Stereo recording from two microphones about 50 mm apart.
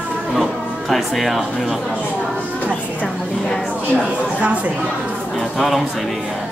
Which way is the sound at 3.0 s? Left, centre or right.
Centre.